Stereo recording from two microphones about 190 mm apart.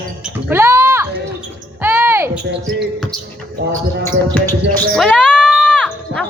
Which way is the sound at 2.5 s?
65° right (ahead or behind).